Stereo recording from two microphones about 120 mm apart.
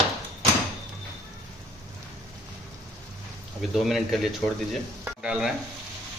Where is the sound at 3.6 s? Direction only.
Centre (ahead or behind).